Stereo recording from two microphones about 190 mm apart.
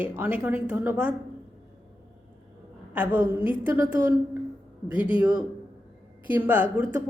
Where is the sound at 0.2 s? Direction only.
5° right (ahead or behind).